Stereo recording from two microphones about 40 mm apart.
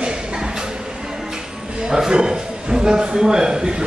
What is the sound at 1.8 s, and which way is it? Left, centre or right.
A man's voice, centre.